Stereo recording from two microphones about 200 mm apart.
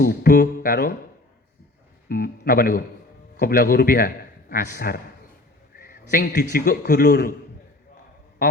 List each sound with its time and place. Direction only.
0.0 s a man's voice: 50° left (ahead or behind)
2.0 s a man's voice: 50° left (ahead or behind)